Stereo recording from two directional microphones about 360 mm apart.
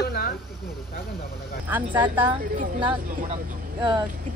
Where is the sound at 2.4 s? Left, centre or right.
Right.